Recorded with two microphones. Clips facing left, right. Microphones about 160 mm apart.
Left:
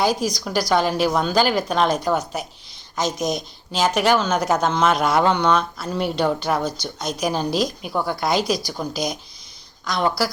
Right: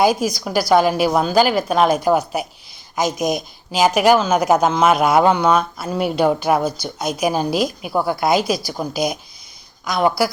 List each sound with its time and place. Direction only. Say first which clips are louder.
0.0 s speech: right 4 dB; 10° right (ahead or behind)